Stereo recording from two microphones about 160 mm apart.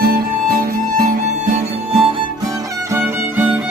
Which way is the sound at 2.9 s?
15° right (ahead or behind).